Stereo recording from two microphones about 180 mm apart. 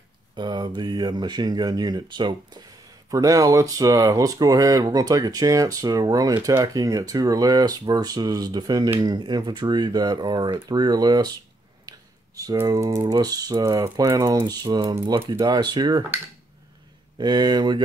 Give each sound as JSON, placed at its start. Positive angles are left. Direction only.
{"t": 0.4, "sound": "speech", "side_deg": -25}
{"t": 11.9, "sound": "a sound", "side_deg": -20}
{"t": 12.4, "sound": "speech", "side_deg": -20}
{"t": 17.2, "sound": "speech", "side_deg": -25}